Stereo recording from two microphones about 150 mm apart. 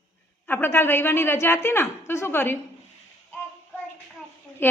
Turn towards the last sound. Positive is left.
turn(degrees=15)  # may be behind; listen again after turning